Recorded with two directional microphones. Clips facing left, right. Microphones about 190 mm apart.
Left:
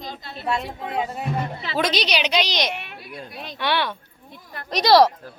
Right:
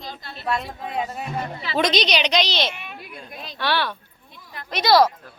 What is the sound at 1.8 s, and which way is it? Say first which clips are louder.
Speech: right 2 dB; 10° left (ahead or behind).